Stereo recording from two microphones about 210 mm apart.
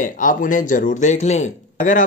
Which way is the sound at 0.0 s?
40° left (ahead or behind).